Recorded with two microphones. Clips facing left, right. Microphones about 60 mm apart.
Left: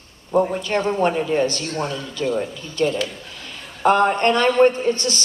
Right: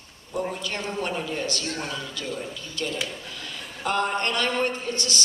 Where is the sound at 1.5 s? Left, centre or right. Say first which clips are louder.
Left 5 dB; left.